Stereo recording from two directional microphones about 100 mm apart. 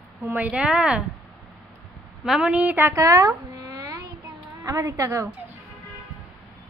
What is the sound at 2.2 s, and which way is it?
Speech, 10° right (ahead or behind).